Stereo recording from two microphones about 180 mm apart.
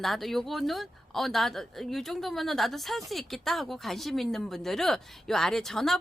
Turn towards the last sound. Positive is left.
turn(degrees=0)  # may be behind; listen again after turning